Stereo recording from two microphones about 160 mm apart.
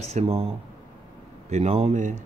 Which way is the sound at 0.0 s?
40° right (ahead or behind).